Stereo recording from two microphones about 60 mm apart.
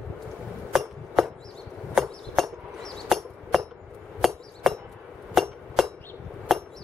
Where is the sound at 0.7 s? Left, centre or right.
Centre.